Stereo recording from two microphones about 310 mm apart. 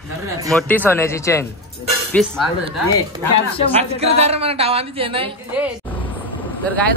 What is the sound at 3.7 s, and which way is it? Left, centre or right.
Speech, centre.